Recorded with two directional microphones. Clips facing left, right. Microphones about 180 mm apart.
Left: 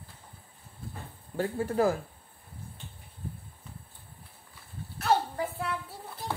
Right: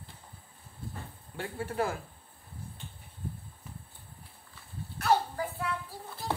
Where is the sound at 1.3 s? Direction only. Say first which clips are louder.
Left 5 dB; 40° left (ahead or behind).